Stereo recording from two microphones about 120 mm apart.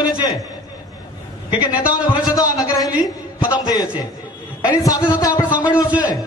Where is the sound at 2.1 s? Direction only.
30° left (ahead or behind).